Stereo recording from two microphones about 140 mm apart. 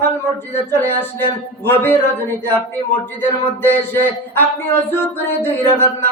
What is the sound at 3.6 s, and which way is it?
Speech, 15° left (ahead or behind).